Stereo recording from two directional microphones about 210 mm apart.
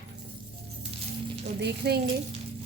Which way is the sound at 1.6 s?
50° right (ahead or behind).